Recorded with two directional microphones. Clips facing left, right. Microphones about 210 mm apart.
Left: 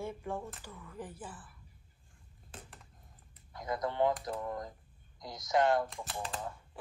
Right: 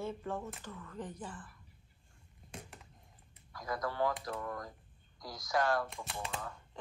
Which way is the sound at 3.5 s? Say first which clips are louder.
Left 2 dB; 20° left (ahead or behind).